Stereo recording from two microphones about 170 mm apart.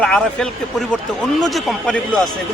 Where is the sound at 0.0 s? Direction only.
5° left (ahead or behind).